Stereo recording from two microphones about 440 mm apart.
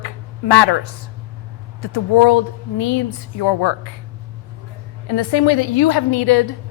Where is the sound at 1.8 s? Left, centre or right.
Left.